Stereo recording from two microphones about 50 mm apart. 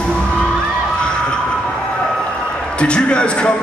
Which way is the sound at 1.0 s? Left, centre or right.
Centre.